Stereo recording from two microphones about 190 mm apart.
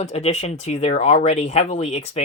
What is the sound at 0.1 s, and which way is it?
Speech, 35° left (ahead or behind).